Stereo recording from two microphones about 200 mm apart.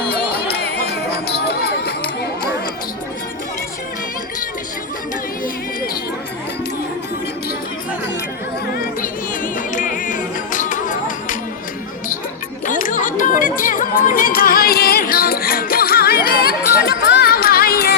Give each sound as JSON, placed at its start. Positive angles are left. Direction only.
{"t": 0.1, "sound": "music", "side_deg": 55}
{"t": 8.7, "sound": "music", "side_deg": 45}
{"t": 12.6, "sound": "chatter", "side_deg": 40}